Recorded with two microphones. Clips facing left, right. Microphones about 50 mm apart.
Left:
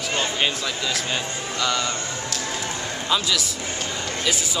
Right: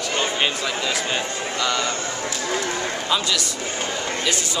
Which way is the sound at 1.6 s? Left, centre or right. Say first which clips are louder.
Even; centre.